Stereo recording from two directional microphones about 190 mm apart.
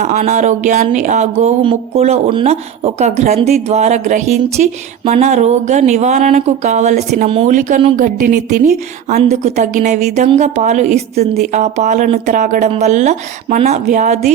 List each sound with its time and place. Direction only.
0.0 s speech: 40° right (ahead or behind)